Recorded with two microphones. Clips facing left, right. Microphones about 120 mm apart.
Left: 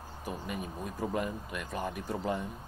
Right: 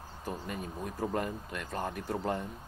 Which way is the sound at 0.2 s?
15° left (ahead or behind).